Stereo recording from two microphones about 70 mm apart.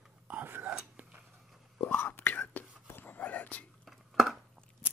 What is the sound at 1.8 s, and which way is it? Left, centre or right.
Whispering, left.